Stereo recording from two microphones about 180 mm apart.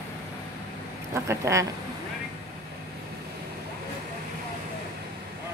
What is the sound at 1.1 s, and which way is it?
Speech, 15° right (ahead or behind).